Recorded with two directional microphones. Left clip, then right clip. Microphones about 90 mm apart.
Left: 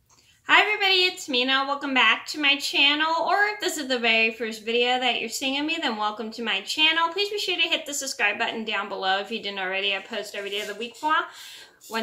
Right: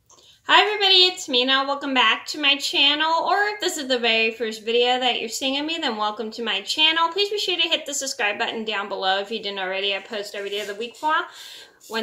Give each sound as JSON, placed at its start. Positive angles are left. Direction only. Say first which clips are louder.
{"t": 0.5, "sound": "a woman's voice", "louder": "right 3 dB", "side_deg": -15}